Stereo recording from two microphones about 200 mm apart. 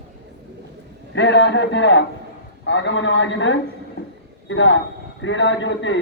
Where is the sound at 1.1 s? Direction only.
60° left (ahead or behind).